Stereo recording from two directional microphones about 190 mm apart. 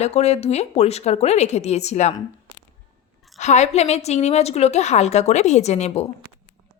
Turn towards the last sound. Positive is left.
turn(degrees=35)  # may be behind; listen again after turning